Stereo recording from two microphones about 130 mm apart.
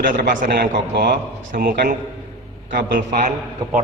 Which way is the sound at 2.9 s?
75° right (ahead or behind).